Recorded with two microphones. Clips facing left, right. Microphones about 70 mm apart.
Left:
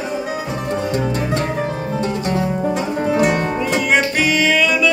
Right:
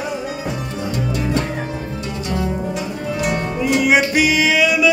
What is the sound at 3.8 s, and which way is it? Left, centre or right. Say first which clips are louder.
Music: right 2 dB; centre.